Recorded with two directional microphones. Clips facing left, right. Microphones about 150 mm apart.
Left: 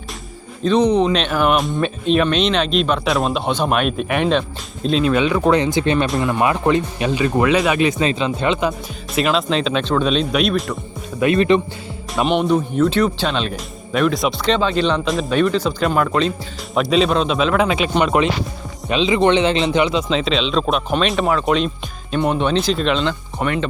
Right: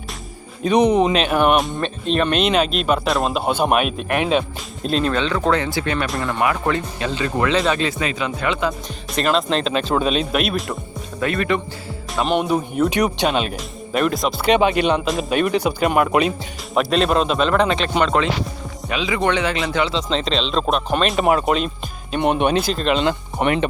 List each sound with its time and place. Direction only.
0.6 s speech: 10° right (ahead or behind)
5.1 s speech: 10° left (ahead or behind)
9.1 s speech: centre (ahead or behind)
11.2 s speech: 20° left (ahead or behind)
12.1 s speech: centre (ahead or behind)
15.0 s speech: centre (ahead or behind)
16.7 s speech: centre (ahead or behind)
18.9 s speech: 25° left (ahead or behind)
20.1 s speech: 5° left (ahead or behind)
22.2 s speech: 15° right (ahead or behind)
22.5 s speech: centre (ahead or behind)
23.0 s speech: 20° right (ahead or behind)